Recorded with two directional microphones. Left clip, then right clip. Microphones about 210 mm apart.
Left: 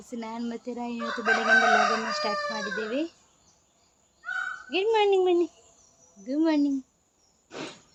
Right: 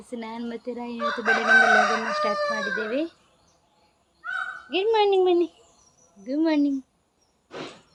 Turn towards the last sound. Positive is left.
turn(degrees=10)  # may be behind; listen again after turning